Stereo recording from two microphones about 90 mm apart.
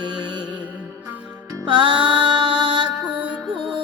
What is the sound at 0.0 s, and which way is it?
Music, 55° right (ahead or behind).